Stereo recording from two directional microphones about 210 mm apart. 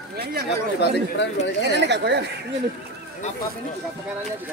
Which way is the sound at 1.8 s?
55° right (ahead or behind).